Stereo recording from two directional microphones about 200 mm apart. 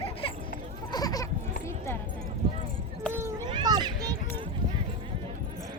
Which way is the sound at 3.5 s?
20° right (ahead or behind).